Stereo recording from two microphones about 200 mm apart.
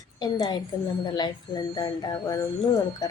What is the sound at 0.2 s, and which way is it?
Speech, 20° left (ahead or behind).